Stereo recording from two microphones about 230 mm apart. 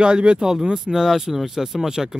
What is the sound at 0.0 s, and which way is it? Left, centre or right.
Speech, centre.